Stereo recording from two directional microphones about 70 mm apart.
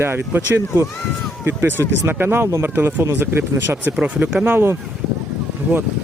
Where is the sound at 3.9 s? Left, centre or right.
Centre.